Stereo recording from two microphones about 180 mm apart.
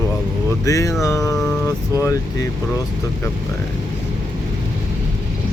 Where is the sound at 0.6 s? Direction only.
15° left (ahead or behind).